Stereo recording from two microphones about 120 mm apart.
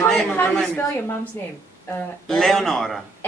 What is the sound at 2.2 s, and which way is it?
Speech, centre (ahead or behind).